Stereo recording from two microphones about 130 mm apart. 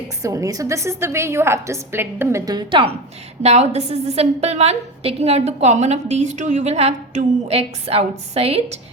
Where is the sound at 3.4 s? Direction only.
55° right (ahead or behind).